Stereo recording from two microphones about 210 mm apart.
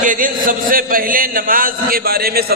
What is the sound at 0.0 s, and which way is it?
A man's voice, 40° right (ahead or behind).